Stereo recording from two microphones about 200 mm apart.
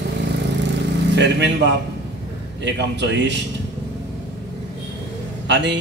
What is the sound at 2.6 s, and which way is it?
Speech, 60° right (ahead or behind).